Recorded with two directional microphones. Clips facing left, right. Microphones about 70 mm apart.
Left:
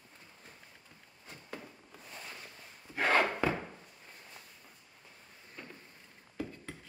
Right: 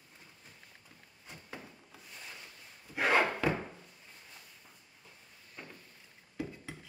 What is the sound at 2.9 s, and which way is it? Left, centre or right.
Wood, centre.